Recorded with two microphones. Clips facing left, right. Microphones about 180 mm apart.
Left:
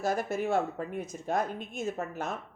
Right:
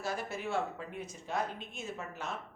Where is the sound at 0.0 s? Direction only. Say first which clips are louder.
Left 7 dB; 45° left (ahead or behind).